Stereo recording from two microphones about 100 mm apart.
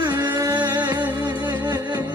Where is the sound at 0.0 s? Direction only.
45° right (ahead or behind).